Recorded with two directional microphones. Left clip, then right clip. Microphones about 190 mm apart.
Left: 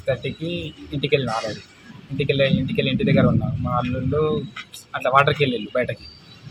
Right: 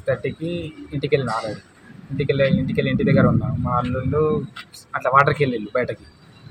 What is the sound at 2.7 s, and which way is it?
Speech, 45° right (ahead or behind).